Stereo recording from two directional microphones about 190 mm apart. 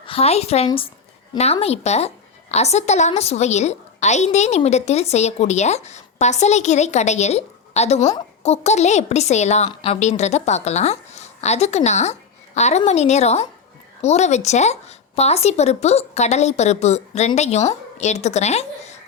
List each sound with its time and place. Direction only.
0.0 s a woman's voice: 30° left (ahead or behind)